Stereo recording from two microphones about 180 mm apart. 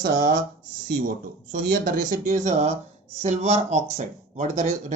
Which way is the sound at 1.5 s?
50° right (ahead or behind).